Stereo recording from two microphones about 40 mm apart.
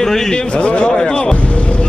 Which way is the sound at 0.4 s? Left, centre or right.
Left.